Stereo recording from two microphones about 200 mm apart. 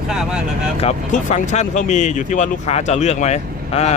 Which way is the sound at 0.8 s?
35° left (ahead or behind).